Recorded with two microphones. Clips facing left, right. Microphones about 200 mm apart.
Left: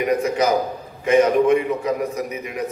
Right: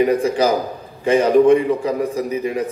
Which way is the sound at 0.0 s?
30° right (ahead or behind).